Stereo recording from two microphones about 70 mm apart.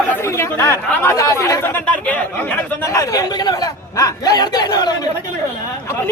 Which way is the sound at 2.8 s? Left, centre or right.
Left.